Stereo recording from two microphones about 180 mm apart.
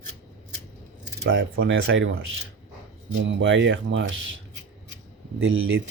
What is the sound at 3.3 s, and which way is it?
Speech, 90° right.